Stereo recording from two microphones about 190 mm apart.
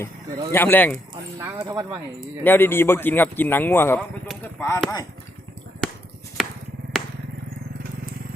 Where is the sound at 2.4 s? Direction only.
10° left (ahead or behind).